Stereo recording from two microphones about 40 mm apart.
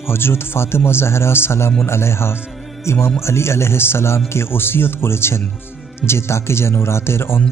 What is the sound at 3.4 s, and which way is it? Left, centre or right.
A man's voice, left.